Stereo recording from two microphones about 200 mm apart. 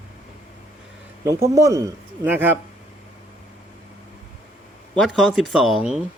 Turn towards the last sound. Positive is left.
turn(degrees=0)  # may be behind; listen again after turning